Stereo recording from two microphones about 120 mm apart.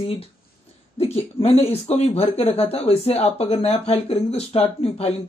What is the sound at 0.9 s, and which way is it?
Speech, 55° left (ahead or behind).